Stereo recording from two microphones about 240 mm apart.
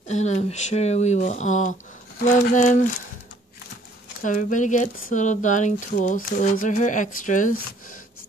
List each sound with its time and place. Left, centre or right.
0.1 s speech: left
4.2 s speech: left